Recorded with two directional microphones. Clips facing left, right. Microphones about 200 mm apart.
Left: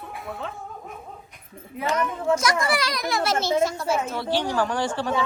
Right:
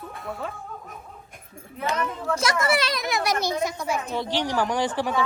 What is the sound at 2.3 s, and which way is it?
A child's voice, 25° right (ahead or behind).